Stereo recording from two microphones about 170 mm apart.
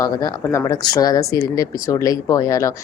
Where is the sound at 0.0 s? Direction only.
20° left (ahead or behind).